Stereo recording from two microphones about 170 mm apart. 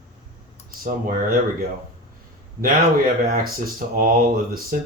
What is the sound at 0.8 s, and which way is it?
Speech, 55° right (ahead or behind).